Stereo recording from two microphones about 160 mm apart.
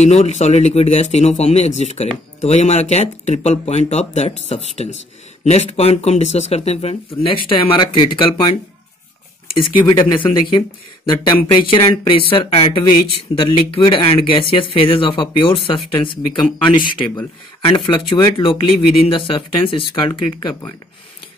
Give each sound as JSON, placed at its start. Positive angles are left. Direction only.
{"t": 0.0, "sound": "speech", "side_deg": 45}
{"t": 9.6, "sound": "speech", "side_deg": 30}
{"t": 11.5, "sound": "speech", "side_deg": 35}
{"t": 20.1, "sound": "speech", "side_deg": 20}